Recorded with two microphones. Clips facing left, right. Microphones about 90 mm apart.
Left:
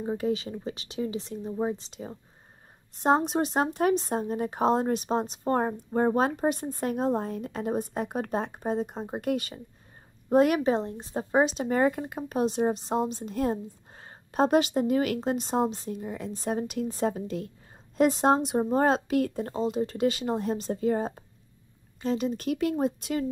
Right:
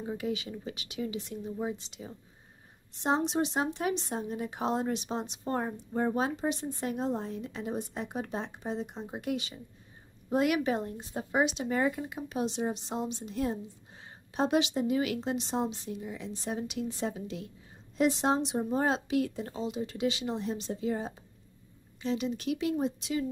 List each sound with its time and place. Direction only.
0.0 s speech: 35° left (ahead or behind)